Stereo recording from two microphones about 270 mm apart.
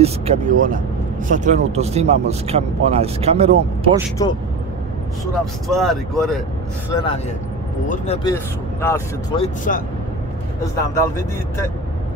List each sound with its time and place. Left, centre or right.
0.0 s speech: right
4.2 s speech: centre
5.4 s speech: centre
6.9 s speech: centre
9.4 s speech: left